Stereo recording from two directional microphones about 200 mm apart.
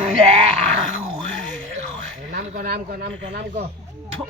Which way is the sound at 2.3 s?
40° right (ahead or behind).